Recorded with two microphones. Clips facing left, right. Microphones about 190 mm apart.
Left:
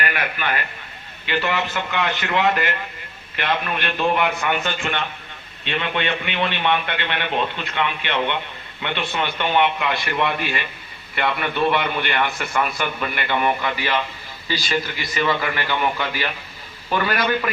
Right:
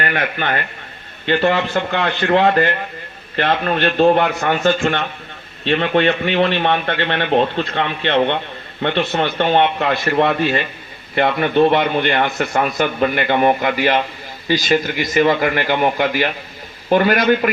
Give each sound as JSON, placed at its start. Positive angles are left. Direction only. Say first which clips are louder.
{"t": 0.0, "sound": "a man's voice", "louder": "right 5 dB", "side_deg": -45}
{"t": 1.3, "sound": "a man's voice", "louder": "right 7 dB", "side_deg": -50}